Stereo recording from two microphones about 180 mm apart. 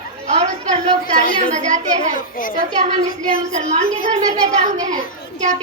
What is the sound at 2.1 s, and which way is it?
Speech, 50° left (ahead or behind).